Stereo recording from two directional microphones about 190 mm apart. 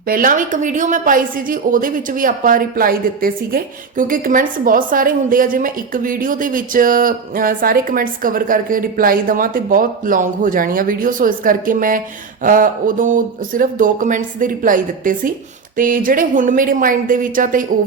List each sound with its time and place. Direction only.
0.1 s a woman's voice: 45° right (ahead or behind)